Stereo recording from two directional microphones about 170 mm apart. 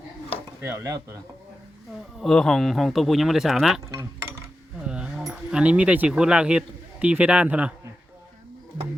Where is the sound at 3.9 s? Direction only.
20° right (ahead or behind).